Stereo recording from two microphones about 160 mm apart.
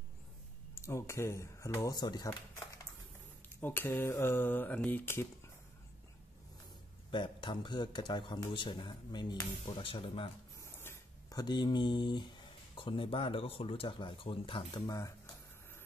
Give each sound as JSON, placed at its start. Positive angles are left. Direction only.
{"t": 0.7, "sound": "mantra", "side_deg": 15}
{"t": 3.4, "sound": "mantra", "side_deg": 15}
{"t": 7.1, "sound": "a man's voice", "side_deg": 30}
{"t": 10.6, "sound": "a sound", "side_deg": 15}
{"t": 12.7, "sound": "speech", "side_deg": 30}